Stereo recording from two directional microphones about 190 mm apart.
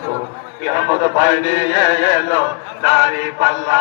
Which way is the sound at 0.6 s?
30° right (ahead or behind).